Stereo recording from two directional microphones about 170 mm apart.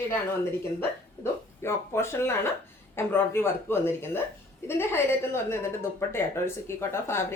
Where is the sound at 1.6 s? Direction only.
15° left (ahead or behind).